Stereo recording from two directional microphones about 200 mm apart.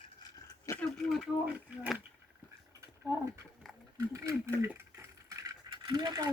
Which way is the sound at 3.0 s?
5° left (ahead or behind).